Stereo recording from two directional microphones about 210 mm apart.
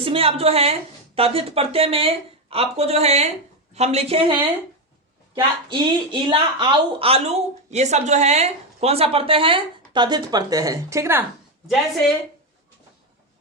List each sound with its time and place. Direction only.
0.0 s a woman's voice: 25° right (ahead or behind); by 11.3 s 10° right (ahead or behind)